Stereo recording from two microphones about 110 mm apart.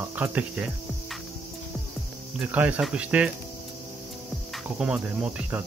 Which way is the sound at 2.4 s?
15° right (ahead or behind).